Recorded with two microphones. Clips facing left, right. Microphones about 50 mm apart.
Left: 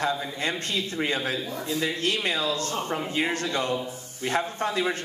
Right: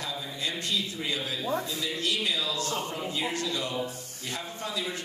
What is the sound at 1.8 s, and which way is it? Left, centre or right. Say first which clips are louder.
Music: left 4 dB; left.